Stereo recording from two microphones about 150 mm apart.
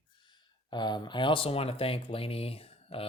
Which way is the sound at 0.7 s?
30° left (ahead or behind).